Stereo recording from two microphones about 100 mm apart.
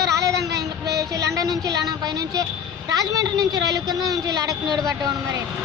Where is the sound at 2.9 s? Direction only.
35° right (ahead or behind).